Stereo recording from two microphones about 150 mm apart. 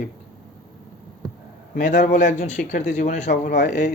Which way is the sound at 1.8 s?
60° left (ahead or behind).